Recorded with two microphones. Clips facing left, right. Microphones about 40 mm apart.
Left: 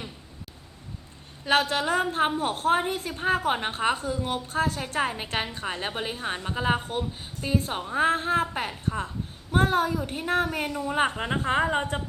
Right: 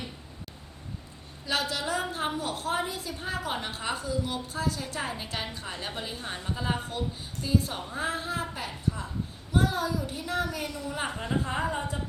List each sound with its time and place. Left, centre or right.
1.5 s a woman's voice: left